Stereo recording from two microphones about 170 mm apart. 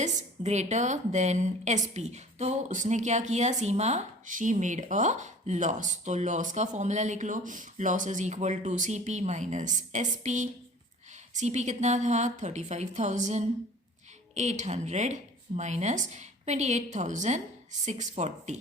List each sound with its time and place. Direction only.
0.0 s a woman's voice: 45° right (ahead or behind)